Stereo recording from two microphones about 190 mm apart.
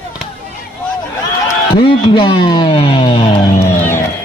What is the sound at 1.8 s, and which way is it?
Speech, 25° left (ahead or behind).